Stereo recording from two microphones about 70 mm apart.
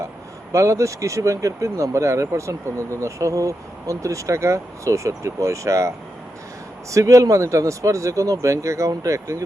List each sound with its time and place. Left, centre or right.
0.5 s speech: right
6.9 s speech: right